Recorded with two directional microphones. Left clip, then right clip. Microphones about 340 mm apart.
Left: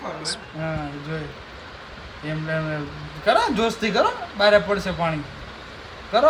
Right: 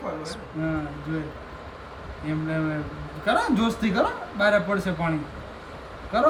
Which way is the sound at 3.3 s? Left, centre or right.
Left.